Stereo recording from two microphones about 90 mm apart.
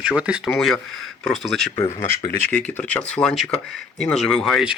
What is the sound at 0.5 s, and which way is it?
Speech, 5° left (ahead or behind).